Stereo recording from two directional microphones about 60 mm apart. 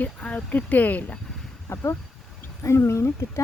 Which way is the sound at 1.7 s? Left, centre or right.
Left.